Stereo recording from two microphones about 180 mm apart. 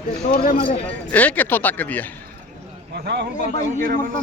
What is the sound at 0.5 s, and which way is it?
Speech, 35° left (ahead or behind).